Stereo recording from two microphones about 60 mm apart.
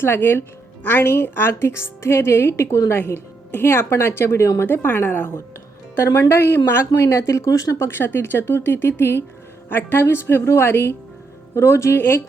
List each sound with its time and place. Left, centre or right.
0.0 s a woman's voice: left
4.6 s speech: left
6.0 s a woman's voice: left
7.8 s a woman's voice: left